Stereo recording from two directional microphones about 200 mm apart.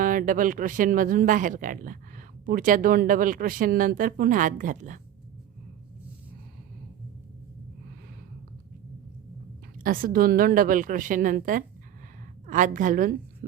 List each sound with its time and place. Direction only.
0.0 s speech: 40° right (ahead or behind)
9.8 s a woman's voice: 45° right (ahead or behind)